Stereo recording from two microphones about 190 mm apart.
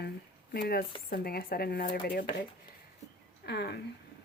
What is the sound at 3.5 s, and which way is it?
Speech, 60° left (ahead or behind).